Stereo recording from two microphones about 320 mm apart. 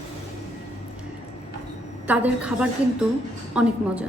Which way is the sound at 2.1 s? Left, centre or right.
Centre.